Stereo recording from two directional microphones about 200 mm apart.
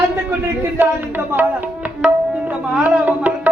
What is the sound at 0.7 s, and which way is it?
Tabla, 10° right (ahead or behind).